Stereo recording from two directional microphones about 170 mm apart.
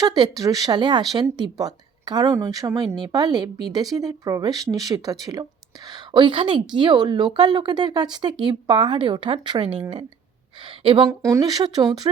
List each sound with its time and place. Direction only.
0.0 s a woman's voice: 25° right (ahead or behind)
11.2 s speech: 20° right (ahead or behind)